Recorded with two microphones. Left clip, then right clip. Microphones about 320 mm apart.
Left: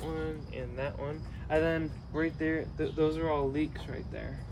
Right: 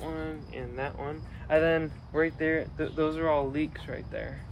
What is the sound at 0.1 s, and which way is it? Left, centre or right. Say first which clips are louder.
Speech: even; centre.